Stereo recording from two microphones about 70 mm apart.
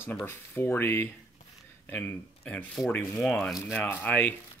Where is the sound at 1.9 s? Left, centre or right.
Left.